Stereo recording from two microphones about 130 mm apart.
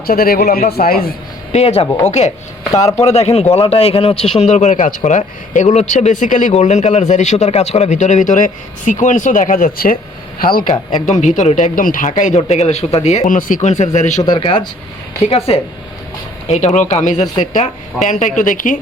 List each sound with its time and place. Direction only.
0.1 s speech: 90° left
1.5 s speech: 55° left (ahead or behind); by 10.0 s 90° left
10.7 s speech: 65° left (ahead or behind)
14.2 s speech: 35° left (ahead or behind)
15.2 s speech: 50° left (ahead or behind)
16.5 s a woman's voice: 65° left (ahead or behind); by 18.8 s 90° left